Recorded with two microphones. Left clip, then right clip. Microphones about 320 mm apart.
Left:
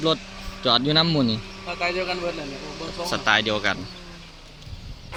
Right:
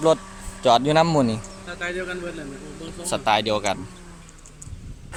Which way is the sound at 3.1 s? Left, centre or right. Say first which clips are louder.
Right 1 dB; centre.